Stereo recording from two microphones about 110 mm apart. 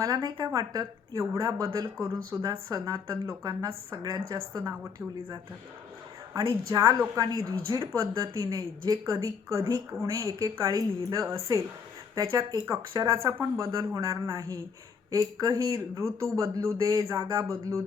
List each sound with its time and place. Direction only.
0.0 s a woman's voice: 35° right (ahead or behind)